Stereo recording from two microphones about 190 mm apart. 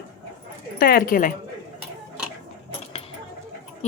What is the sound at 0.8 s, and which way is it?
Speech, 50° left (ahead or behind).